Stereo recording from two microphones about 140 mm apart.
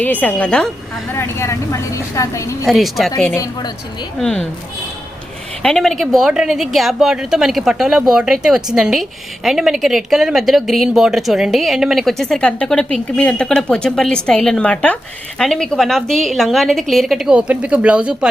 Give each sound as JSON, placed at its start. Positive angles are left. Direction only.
{"t": 0.0, "sound": "a woman's voice", "side_deg": 10}
{"t": 1.1, "sound": "a woman's voice", "side_deg": 20}
{"t": 2.6, "sound": "a woman's voice", "side_deg": 0}
{"t": 3.3, "sound": "a woman's voice", "side_deg": 25}
{"t": 4.2, "sound": "a woman's voice", "side_deg": 5}
{"t": 5.6, "sound": "a woman's voice", "side_deg": 5}